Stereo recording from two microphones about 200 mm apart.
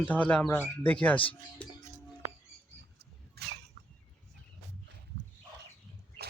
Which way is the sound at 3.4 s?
55° right (ahead or behind).